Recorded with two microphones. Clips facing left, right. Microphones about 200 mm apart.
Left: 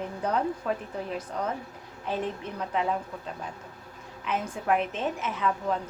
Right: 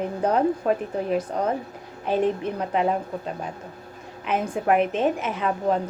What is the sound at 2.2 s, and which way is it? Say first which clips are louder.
Speech: right 9 dB; 65° right (ahead or behind).